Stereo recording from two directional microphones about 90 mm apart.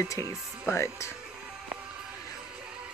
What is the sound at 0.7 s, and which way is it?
Speech, 30° left (ahead or behind).